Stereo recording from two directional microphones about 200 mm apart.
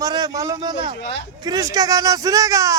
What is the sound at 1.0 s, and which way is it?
Speech, 60° left (ahead or behind).